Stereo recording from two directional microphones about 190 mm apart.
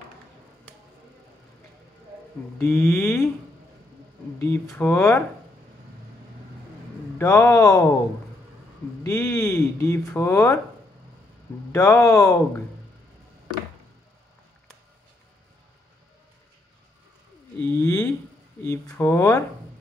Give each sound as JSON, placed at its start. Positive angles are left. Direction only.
{"t": 2.6, "sound": "speech", "side_deg": 10}
{"t": 4.4, "sound": "speech", "side_deg": 10}
{"t": 7.2, "sound": "speech", "side_deg": 15}
{"t": 9.0, "sound": "speech", "side_deg": 15}
{"t": 11.7, "sound": "speech", "side_deg": 15}
{"t": 17.6, "sound": "a sound", "side_deg": 15}
{"t": 18.6, "sound": "speech", "side_deg": 15}